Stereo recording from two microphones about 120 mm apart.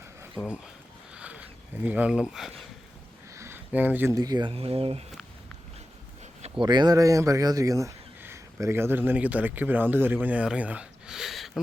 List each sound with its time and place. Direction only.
0.3 s speech: 10° right (ahead or behind)
1.1 s a sound: 10° right (ahead or behind)
3.3 s a sound: 20° right (ahead or behind)
4.1 s speech: 30° right (ahead or behind)
4.5 s speech: 55° right (ahead or behind)
6.6 s speech: 40° right (ahead or behind); by 11.6 s centre (ahead or behind)